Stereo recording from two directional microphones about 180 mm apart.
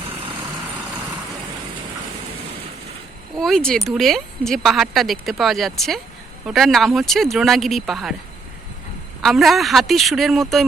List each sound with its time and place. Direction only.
3.3 s speech: centre (ahead or behind)
9.2 s speech: centre (ahead or behind)